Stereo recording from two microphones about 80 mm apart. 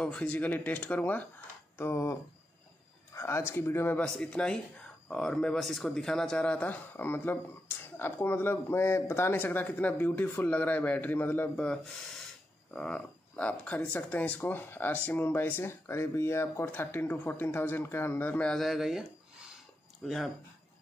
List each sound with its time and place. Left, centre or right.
0.0 s speech: centre
1.8 s speech: left
3.2 s speech: left
4.0 s a man's voice: centre
12.7 s speech: centre
18.5 s speech: centre